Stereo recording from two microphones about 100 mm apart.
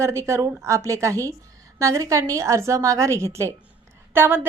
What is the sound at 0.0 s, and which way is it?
A woman's voice, 30° right (ahead or behind).